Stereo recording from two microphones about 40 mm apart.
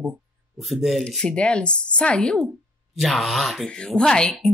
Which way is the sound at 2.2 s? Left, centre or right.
Centre.